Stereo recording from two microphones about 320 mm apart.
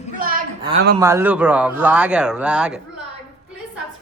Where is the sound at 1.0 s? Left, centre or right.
Centre.